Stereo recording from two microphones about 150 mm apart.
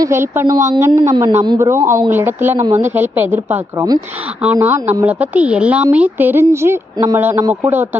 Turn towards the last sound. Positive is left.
turn(degrees=-15)  # may be behind; listen again after turning